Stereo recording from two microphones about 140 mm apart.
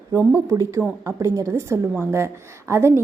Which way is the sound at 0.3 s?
25° right (ahead or behind).